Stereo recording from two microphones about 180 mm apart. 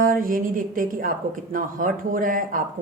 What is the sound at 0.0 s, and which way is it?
A woman's voice, 50° right (ahead or behind).